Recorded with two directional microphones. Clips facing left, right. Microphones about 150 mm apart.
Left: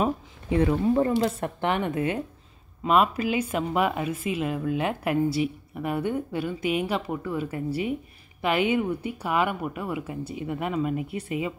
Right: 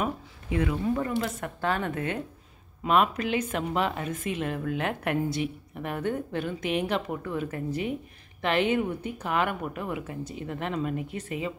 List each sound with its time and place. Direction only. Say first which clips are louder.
0.0 s a woman's voice: left 5 dB; 35° left (ahead or behind); by 2.1 s 15° left (ahead or behind)
2.8 s a woman's voice: left 2 dB; 5° left (ahead or behind)